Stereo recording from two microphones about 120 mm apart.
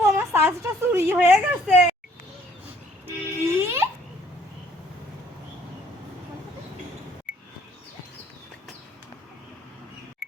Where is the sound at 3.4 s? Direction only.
20° right (ahead or behind).